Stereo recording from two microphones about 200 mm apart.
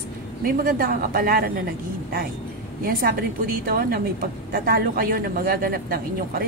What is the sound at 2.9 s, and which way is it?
A woman's voice, 50° right (ahead or behind).